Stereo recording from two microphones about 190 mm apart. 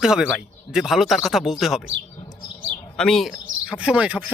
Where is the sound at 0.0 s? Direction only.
5° right (ahead or behind).